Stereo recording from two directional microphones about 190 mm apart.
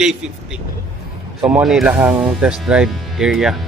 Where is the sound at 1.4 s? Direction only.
5° right (ahead or behind).